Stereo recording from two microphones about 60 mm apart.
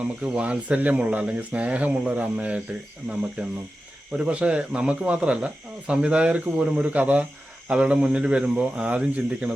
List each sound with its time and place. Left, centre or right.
0.0 s speech: right
3.1 s cricket: centre
4.2 s speech: centre